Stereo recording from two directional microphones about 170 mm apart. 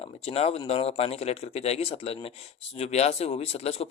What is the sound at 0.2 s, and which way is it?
Speech, 35° left (ahead or behind).